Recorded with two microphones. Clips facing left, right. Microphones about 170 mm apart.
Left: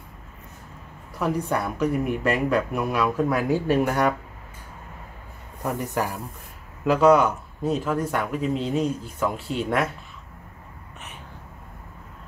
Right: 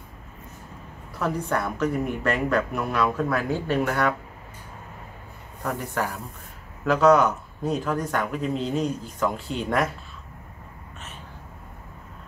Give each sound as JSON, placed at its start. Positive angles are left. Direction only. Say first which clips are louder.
{"t": 1.2, "sound": "a woman's voice", "louder": "left 1 dB", "side_deg": 10}
{"t": 5.6, "sound": "a woman's voice", "louder": "left 2 dB", "side_deg": 15}